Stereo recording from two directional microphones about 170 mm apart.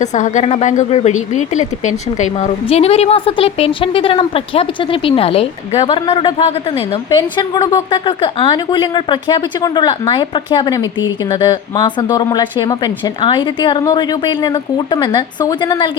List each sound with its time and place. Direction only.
0.0 s a woman's voice: 45° left (ahead or behind); by 15.9 s 25° left (ahead or behind)